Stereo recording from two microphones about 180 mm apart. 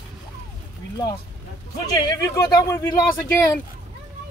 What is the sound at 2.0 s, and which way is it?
Speech, 20° left (ahead or behind).